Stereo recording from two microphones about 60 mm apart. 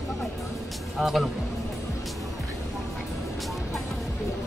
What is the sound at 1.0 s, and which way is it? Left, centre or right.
Speech, centre.